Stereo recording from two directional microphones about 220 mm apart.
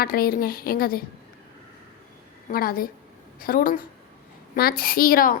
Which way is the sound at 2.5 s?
40° left (ahead or behind).